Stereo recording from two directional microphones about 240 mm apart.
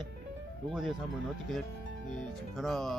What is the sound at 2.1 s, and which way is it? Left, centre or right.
Speech, centre.